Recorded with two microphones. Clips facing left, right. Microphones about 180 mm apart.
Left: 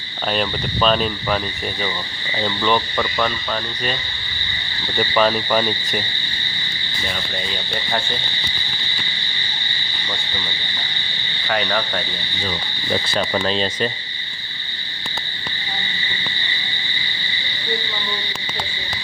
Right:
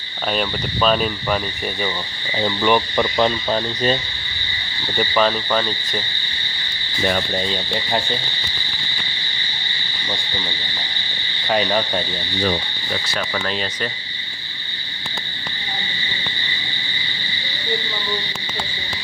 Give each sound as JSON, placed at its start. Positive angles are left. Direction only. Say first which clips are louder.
{"t": 0.3, "sound": "speech", "louder": "even", "side_deg": 0}
{"t": 2.4, "sound": "speech", "louder": "right 2 dB", "side_deg": -10}
{"t": 4.9, "sound": "speech", "louder": "left 1 dB", "side_deg": 0}
{"t": 11.4, "sound": "frog", "louder": "right 3 dB", "side_deg": -20}
{"t": 13.1, "sound": "frog", "louder": "left 4 dB", "side_deg": 25}